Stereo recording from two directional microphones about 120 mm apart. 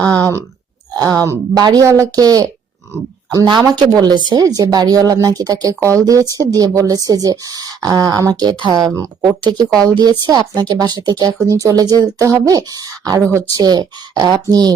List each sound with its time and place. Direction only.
0.0 s speech: 30° right (ahead or behind)